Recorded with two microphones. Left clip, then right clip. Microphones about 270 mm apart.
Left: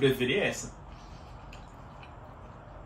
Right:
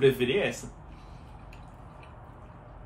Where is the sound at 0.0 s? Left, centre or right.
Centre.